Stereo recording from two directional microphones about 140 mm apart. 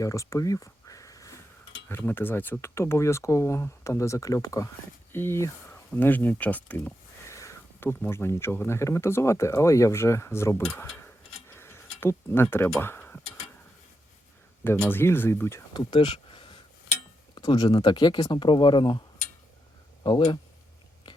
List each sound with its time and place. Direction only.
0.0 s a sound: 25° left (ahead or behind)
1.9 s speech: 15° left (ahead or behind)
10.8 s tick-tock: 10° left (ahead or behind)
14.8 s speech: 15° left (ahead or behind)
15.7 s a sound: 35° left (ahead or behind)
17.3 s speech: 25° left (ahead or behind)